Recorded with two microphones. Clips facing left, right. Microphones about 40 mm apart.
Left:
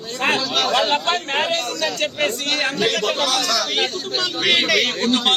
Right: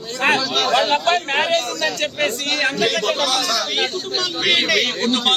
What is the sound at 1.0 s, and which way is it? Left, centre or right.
Speech, right.